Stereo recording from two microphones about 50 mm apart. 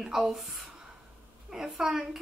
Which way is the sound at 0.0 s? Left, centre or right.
Centre.